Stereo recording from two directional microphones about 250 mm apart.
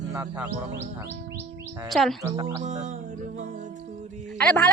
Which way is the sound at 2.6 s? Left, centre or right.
Right.